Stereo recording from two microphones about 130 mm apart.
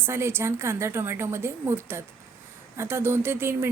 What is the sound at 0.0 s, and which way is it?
A woman's voice, 20° right (ahead or behind).